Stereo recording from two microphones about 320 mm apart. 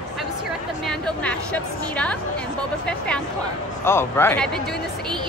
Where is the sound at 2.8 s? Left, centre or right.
Centre.